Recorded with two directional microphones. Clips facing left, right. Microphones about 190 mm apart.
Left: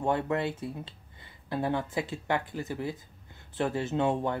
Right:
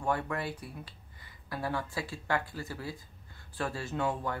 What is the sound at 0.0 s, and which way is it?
Speech, 25° left (ahead or behind).